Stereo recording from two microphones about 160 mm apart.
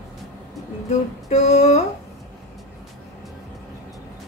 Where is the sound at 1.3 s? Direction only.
45° left (ahead or behind).